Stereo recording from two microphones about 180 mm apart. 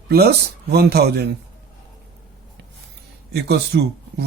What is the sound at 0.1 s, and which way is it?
Speech, 60° right (ahead or behind).